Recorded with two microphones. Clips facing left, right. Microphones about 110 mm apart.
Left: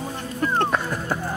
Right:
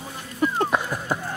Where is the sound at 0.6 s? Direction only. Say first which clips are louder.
Left 1 dB; 10° right (ahead or behind).